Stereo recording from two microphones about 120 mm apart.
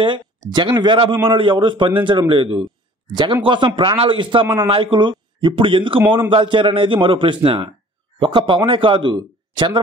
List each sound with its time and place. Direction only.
0.5 s a man's voice: 40° right (ahead or behind)